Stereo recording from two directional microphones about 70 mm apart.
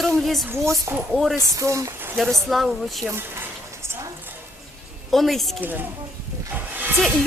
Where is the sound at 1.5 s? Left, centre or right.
Right.